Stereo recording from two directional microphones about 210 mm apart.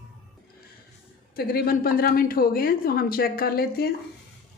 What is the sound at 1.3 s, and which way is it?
Speech, 45° left (ahead or behind).